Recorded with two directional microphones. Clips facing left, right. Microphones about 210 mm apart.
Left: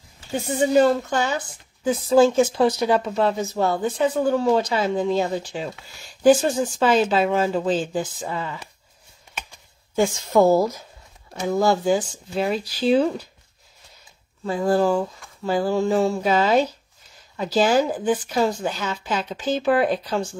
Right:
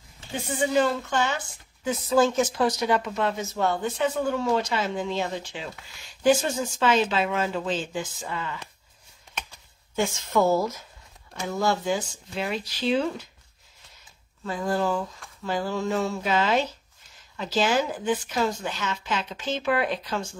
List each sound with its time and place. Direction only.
0.3 s speech: 40° left (ahead or behind)
10.0 s speech: 40° left (ahead or behind)
14.4 s speech: 35° left (ahead or behind)